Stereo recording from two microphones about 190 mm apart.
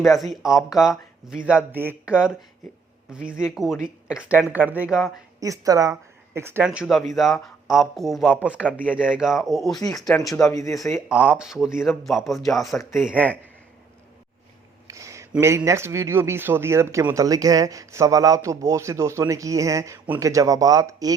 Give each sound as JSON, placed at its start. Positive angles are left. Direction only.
{"t": 0.0, "sound": "speech", "side_deg": 0}
{"t": 5.4, "sound": "speech", "side_deg": -20}
{"t": 10.2, "sound": "speech", "side_deg": 15}
{"t": 11.1, "sound": "speech", "side_deg": -5}
{"t": 14.8, "sound": "a sound", "side_deg": -15}
{"t": 15.3, "sound": "speech", "side_deg": -15}